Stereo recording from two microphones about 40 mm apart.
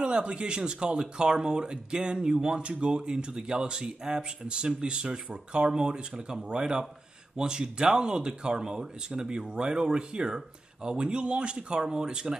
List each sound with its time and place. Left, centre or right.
0.0 s speech: right